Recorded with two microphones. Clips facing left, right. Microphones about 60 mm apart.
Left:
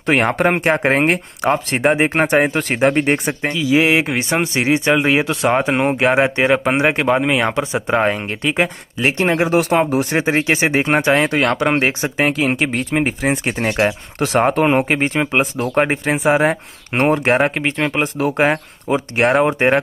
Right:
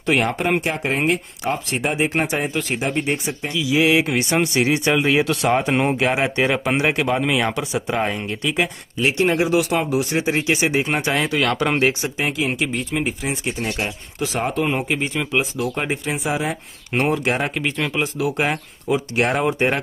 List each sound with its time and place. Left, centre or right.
0.0 s speech: left
3.5 s speech: left
12.2 s speech: left
13.5 s speech: left